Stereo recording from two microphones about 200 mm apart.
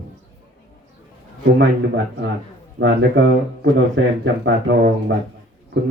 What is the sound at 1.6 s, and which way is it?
A man's voice, 65° right (ahead or behind).